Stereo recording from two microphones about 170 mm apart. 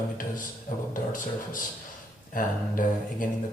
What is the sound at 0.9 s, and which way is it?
Speech, 50° left (ahead or behind).